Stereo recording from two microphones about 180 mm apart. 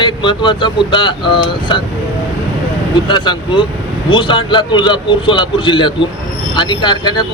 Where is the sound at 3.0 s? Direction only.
25° left (ahead or behind).